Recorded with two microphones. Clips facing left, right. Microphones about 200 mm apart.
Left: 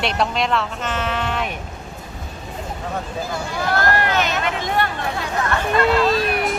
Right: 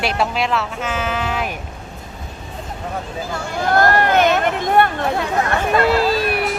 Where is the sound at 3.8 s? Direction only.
50° right (ahead or behind).